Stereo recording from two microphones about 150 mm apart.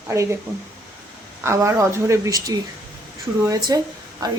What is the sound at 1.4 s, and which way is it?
A woman's voice, 20° right (ahead or behind).